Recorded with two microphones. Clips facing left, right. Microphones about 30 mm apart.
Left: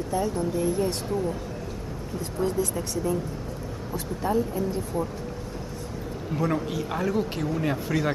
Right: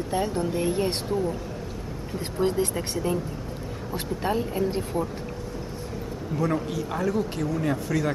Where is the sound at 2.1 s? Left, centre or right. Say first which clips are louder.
Right 2 dB; right.